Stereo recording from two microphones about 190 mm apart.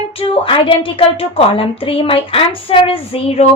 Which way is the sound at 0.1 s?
30° left (ahead or behind).